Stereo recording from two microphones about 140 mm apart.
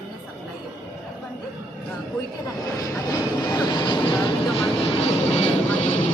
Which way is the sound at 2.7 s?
25° left (ahead or behind).